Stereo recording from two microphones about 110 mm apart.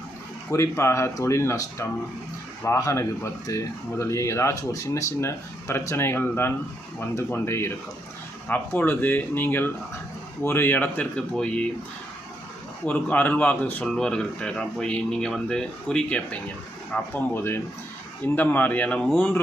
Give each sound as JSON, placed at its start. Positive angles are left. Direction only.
{"t": 0.5, "sound": "speech", "side_deg": 25}
{"t": 12.8, "sound": "speech", "side_deg": 15}